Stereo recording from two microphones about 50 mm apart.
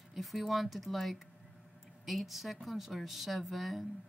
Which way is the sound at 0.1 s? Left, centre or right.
Centre.